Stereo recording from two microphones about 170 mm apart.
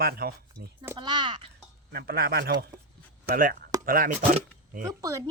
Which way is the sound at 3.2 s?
55° right (ahead or behind).